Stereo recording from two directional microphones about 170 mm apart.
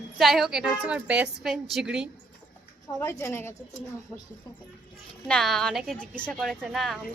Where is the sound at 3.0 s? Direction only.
15° left (ahead or behind).